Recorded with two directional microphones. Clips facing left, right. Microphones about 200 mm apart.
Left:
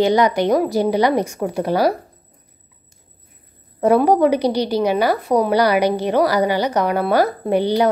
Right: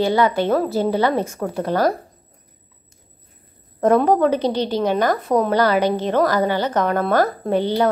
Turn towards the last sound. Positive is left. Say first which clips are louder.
# left 2 dB
turn(degrees=15)  # may be behind; listen again after turning